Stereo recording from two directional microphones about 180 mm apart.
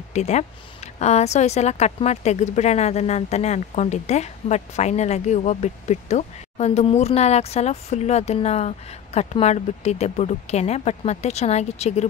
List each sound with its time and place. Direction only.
0.1 s a woman's voice: 40° left (ahead or behind)